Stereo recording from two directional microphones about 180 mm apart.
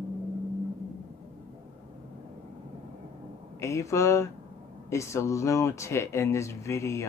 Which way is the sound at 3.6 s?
15° left (ahead or behind).